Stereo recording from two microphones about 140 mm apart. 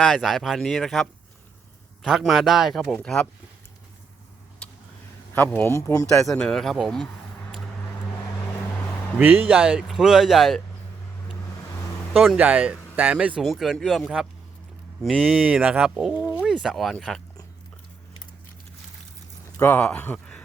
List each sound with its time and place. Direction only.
0.0 s speech: centre (ahead or behind)
4.6 s a sound: 5° left (ahead or behind)
5.5 s speech: 20° left (ahead or behind)
6.2 s speech: 5° left (ahead or behind)
9.1 s speech: 15° right (ahead or behind)
12.1 s speech: centre (ahead or behind)
19.5 s speech: 10° left (ahead or behind)